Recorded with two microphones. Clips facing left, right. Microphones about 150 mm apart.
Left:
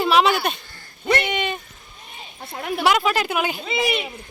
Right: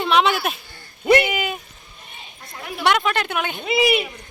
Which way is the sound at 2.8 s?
5° left (ahead or behind).